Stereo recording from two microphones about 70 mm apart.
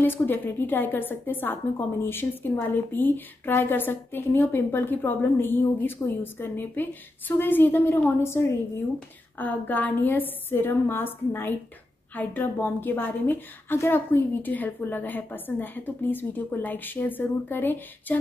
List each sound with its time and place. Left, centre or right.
0.0 s a woman's voice: left
9.4 s a woman's voice: left